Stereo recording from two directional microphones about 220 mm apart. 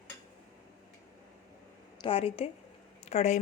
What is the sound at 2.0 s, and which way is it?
Speech, 25° left (ahead or behind).